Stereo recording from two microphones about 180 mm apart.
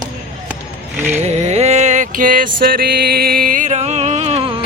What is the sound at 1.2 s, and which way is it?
Music, 40° right (ahead or behind).